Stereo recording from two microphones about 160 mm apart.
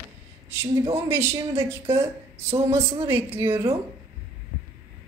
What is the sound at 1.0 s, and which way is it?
Speech, 15° right (ahead or behind).